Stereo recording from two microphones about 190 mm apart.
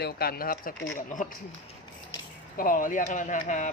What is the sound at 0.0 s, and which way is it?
Speech, 55° left (ahead or behind).